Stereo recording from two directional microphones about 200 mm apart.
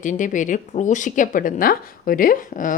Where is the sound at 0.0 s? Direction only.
40° left (ahead or behind).